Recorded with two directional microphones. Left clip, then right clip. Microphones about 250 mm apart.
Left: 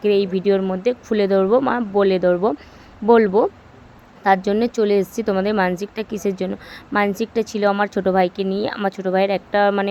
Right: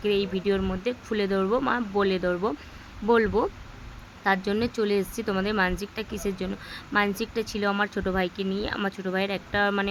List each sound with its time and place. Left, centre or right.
0.0 s a woman's voice: centre